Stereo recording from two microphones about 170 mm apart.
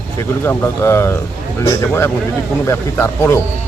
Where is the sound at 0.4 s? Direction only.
15° left (ahead or behind).